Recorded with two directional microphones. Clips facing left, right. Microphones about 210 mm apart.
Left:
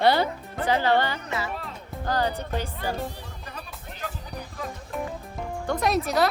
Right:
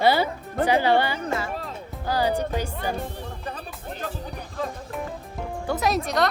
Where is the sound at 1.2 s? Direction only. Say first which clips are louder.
Right 3 dB; 50° right (ahead or behind).